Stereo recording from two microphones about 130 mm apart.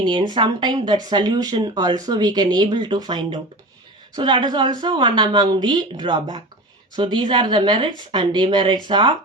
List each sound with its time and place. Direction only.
0.0 s speech: 35° right (ahead or behind)